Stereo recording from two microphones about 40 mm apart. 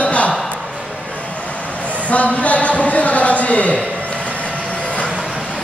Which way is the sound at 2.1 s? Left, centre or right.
Left.